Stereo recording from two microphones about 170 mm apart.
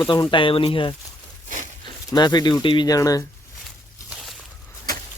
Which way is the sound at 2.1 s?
25° left (ahead or behind).